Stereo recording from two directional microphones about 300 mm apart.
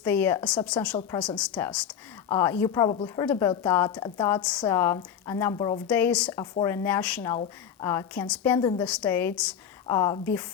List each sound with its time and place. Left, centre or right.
0.0 s a woman's voice: centre
8.5 s a woman's voice: centre
8.8 s a woman's voice: centre